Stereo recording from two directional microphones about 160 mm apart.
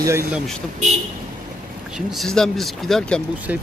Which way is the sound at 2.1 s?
Centre (ahead or behind).